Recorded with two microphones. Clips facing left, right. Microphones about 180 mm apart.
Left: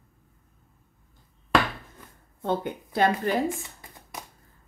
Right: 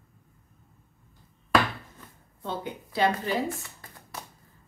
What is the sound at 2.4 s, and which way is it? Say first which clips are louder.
Speech: left 6 dB; 50° left (ahead or behind).